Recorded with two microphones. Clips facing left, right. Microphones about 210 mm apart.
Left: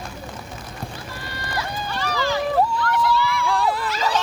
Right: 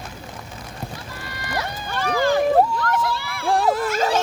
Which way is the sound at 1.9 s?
50° right (ahead or behind).